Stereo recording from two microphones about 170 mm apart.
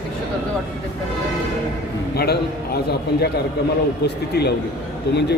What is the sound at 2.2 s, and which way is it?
A man's voice, 65° left (ahead or behind).